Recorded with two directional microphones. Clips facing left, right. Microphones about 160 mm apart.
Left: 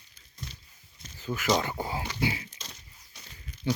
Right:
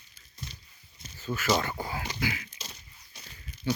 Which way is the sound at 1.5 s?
20° left (ahead or behind).